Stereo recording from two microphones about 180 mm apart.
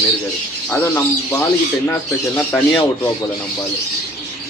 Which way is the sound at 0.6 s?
10° left (ahead or behind).